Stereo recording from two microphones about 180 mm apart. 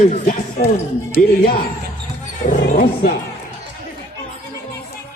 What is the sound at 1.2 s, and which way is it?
Speech, 55° left (ahead or behind).